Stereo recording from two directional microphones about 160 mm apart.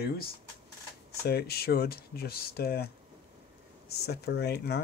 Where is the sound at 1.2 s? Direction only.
80° left.